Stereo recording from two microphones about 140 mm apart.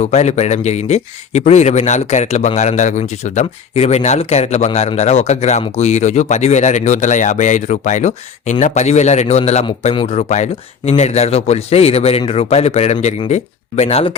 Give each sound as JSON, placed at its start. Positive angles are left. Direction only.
{"t": 0.0, "sound": "speech", "side_deg": 55}